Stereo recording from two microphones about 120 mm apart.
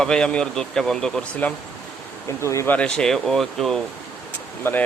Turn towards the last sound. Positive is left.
turn(degrees=15)  # may be behind; listen again after turning